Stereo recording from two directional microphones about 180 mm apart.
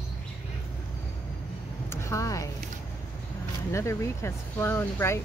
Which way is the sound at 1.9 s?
15° left (ahead or behind).